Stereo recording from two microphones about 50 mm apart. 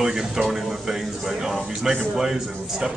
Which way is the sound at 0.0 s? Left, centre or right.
Centre.